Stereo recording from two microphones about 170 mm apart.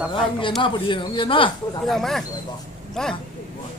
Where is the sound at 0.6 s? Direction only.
30° left (ahead or behind).